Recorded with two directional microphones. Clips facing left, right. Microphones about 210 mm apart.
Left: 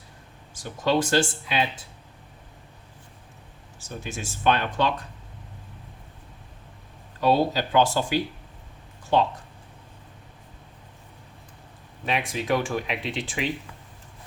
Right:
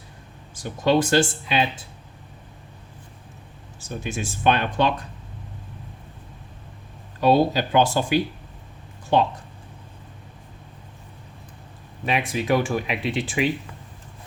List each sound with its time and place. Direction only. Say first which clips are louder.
0.5 s speech: right 4 dB; 15° right (ahead or behind)
3.8 s speech: right 5 dB; 15° right (ahead or behind)
7.2 s speech: right 3 dB; 15° right (ahead or behind)
12.0 s speech: right 3 dB; 5° right (ahead or behind)